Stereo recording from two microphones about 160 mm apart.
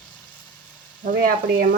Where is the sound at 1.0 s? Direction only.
60° right (ahead or behind).